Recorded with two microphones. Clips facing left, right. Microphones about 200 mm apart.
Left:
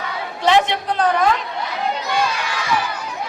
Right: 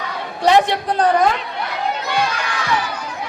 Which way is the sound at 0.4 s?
40° right (ahead or behind).